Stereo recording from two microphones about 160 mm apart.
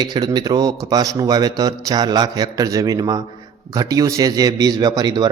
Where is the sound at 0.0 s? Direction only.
25° right (ahead or behind).